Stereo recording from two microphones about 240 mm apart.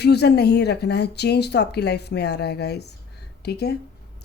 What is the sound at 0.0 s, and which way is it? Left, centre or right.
Speech, left.